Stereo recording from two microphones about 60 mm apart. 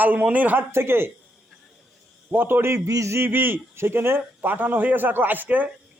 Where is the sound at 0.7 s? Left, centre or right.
Right.